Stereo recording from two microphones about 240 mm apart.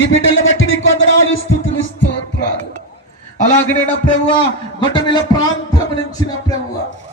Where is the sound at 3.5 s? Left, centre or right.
Left.